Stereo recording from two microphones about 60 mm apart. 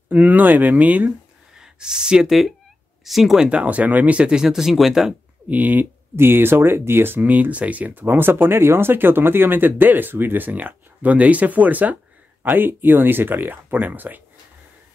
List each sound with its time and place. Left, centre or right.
0.1 s speech: right
1.6 s speech: centre
2.2 s speech: centre
3.4 s speech: right
4.4 s speech: centre
5.5 s speech: right
6.1 s speech: right